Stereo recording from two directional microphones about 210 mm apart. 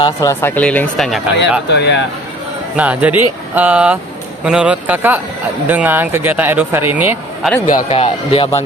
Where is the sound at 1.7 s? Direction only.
55° left (ahead or behind).